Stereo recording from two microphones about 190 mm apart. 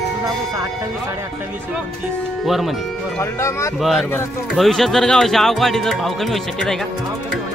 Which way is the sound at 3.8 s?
Centre (ahead or behind).